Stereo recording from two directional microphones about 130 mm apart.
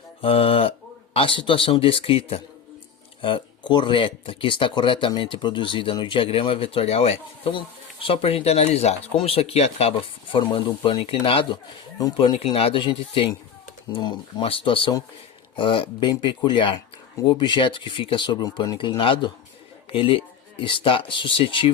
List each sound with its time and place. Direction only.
0.2 s mantra: 45° left (ahead or behind)
1.1 s speech: 40° left (ahead or behind)
10.3 s speech: 40° left (ahead or behind)
11.9 s speech: 30° left (ahead or behind)
12.5 s speech: 45° left (ahead or behind)